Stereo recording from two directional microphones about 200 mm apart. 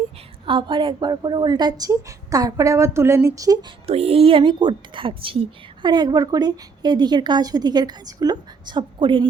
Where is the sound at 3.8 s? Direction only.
30° right (ahead or behind).